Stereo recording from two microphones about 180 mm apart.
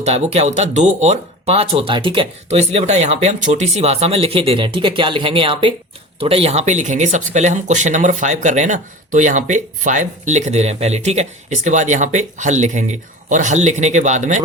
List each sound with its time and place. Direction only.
0.0 s speech: 35° right (ahead or behind)